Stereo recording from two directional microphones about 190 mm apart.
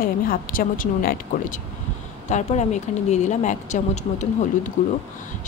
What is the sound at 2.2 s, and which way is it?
Speech, 40° left (ahead or behind).